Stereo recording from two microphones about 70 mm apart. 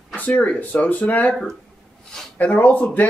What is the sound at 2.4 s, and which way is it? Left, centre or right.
Speech, left.